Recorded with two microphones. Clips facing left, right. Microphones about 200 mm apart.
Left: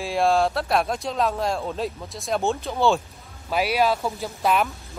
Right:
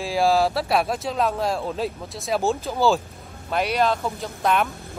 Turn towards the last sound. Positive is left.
turn(degrees=5)  # may be behind; listen again after turning